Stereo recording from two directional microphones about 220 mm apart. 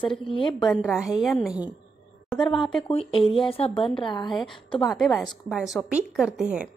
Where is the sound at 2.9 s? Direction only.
25° left (ahead or behind).